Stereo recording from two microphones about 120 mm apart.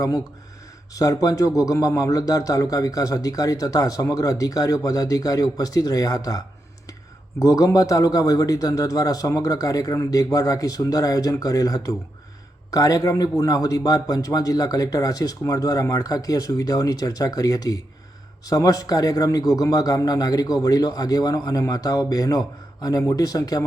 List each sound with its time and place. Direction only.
0.9 s a man's voice: 30° left (ahead or behind)